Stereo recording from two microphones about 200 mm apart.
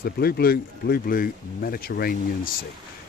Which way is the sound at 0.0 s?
50° left (ahead or behind).